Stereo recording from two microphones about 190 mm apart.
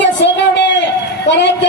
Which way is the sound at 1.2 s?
65° left (ahead or behind).